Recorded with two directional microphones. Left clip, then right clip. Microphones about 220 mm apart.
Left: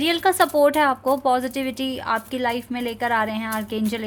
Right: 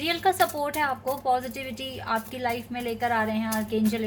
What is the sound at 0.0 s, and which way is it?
Speech, 45° left (ahead or behind).